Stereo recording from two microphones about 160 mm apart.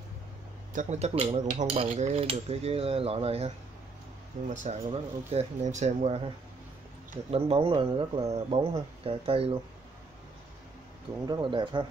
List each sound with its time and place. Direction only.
0.7 s cutlery: 45° right (ahead or behind)
4.4 s speech: 50° right (ahead or behind)
7.1 s cutlery: 40° right (ahead or behind)
11.2 s speech: 30° right (ahead or behind)